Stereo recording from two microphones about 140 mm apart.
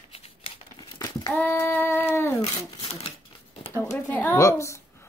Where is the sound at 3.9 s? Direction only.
15° left (ahead or behind).